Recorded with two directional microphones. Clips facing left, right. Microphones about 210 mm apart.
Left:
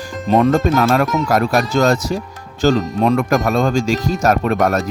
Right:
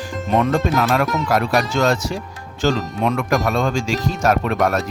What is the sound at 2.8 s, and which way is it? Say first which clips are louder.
Speech: left 5 dB; centre (ahead or behind).